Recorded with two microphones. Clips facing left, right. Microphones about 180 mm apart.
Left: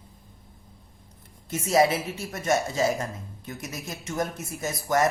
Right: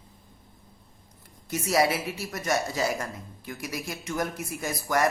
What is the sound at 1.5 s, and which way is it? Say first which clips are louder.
Speech: left 3 dB; 25° left (ahead or behind).